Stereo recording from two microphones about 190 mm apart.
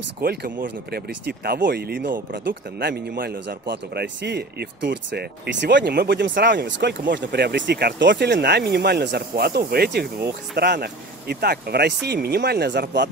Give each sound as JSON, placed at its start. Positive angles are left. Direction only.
{"t": 0.2, "sound": "speech", "side_deg": -55}